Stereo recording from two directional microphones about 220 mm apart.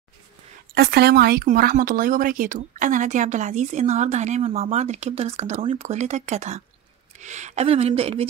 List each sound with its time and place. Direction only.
0.7 s speech: 45° right (ahead or behind); by 8.3 s 25° right (ahead or behind)